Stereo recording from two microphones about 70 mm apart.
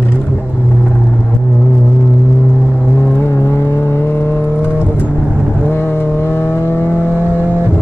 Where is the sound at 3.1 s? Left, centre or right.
Left.